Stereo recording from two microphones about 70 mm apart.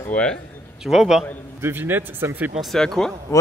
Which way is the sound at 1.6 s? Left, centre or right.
Right.